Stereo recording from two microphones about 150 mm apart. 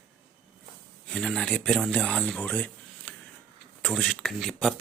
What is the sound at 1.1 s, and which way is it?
Speech, 5° left (ahead or behind).